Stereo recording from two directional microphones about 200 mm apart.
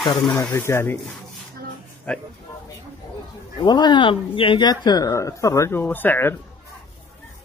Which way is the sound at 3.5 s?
20° left (ahead or behind).